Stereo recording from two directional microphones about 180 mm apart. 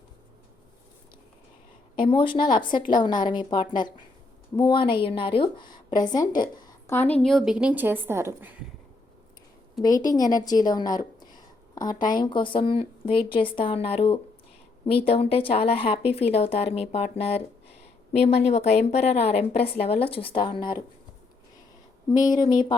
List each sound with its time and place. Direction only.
2.0 s a woman's voice: 30° left (ahead or behind); by 8.5 s 10° right (ahead or behind)
9.8 s a woman's voice: 20° left (ahead or behind)
22.1 s a woman's voice: 20° left (ahead or behind)